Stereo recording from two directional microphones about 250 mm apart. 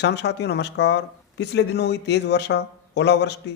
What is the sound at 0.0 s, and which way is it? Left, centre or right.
Speech, left.